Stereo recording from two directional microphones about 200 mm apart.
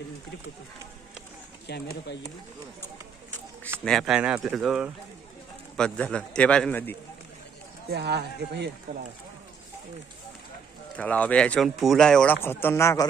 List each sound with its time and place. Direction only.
1.7 s speech: 55° left (ahead or behind)
3.8 s a man's voice: centre (ahead or behind)
7.9 s a man's voice: 55° right (ahead or behind)
11.0 s speech: 5° left (ahead or behind)